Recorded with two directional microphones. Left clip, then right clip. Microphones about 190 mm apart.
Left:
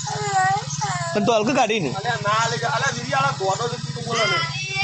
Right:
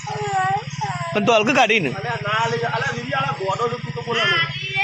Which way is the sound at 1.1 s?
5° left (ahead or behind).